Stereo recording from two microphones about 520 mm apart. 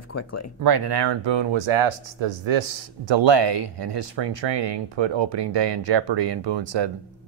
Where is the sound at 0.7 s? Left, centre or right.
Right.